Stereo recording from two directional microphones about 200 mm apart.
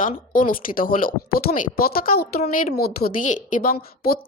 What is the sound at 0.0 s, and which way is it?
A woman's voice, 45° left (ahead or behind).